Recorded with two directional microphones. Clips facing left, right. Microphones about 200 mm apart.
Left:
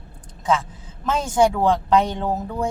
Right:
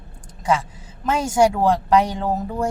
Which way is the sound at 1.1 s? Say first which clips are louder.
Right 1 dB; 10° right (ahead or behind).